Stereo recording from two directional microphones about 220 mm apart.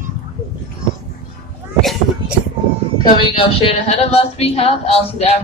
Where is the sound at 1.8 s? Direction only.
Centre (ahead or behind).